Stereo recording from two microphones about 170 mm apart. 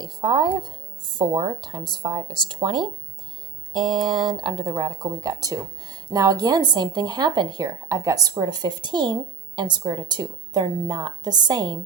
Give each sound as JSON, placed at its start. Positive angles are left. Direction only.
{"t": 0.0, "sound": "a woman's voice", "side_deg": -25}